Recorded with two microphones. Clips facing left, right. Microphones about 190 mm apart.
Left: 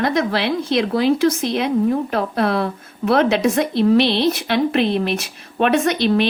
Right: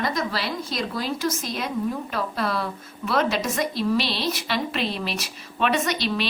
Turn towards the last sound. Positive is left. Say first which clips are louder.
# left 8 dB
turn(degrees=55)  # may be behind; listen again after turning